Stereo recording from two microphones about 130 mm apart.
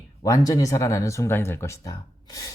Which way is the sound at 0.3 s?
25° left (ahead or behind).